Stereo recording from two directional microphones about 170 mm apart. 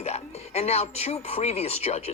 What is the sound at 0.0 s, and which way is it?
Speech, 40° left (ahead or behind).